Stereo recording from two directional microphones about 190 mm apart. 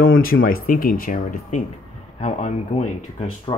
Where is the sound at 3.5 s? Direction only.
20° left (ahead or behind).